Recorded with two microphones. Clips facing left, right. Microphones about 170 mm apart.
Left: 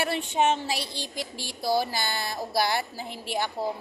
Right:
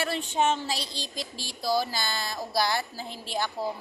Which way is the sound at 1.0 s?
55° left (ahead or behind).